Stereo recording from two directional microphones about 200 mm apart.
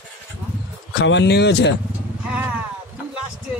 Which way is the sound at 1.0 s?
60° left (ahead or behind).